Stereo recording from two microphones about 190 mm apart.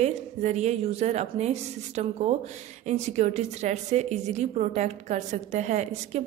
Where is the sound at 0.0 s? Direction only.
35° right (ahead or behind).